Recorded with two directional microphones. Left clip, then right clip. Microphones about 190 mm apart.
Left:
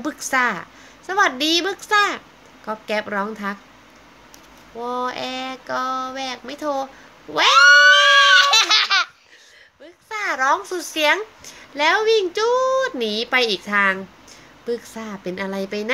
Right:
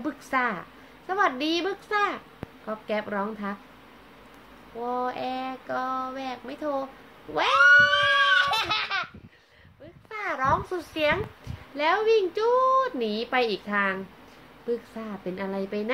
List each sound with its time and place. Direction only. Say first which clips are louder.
0.0 s a woman's voice: left 7 dB; 30° left (ahead or behind)
4.8 s speech: left 4 dB; 25° left (ahead or behind)
8.0 s baby laughter: left 9 dB; 15° right (ahead or behind)
10.0 s a child's voice: left 7 dB; 30° left (ahead or behind)